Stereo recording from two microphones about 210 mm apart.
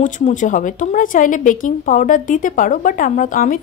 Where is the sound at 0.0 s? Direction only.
35° left (ahead or behind).